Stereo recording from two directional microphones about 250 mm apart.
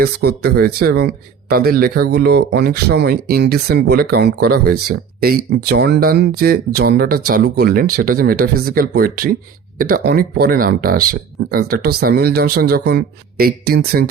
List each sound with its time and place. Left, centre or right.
0.0 s speech: right